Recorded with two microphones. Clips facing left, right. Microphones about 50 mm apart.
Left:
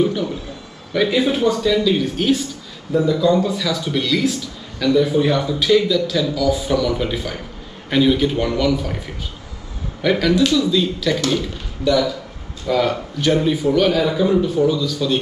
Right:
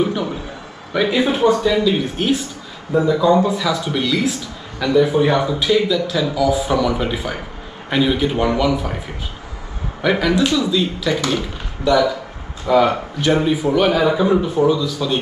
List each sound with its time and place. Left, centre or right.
0.0 s a sound: centre
1.0 s a man's voice: centre
10.0 s a man's voice: centre